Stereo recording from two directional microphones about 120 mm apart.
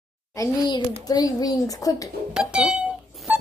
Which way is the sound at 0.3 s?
35° left (ahead or behind).